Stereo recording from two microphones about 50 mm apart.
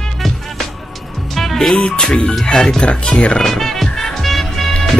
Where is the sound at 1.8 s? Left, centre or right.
Centre.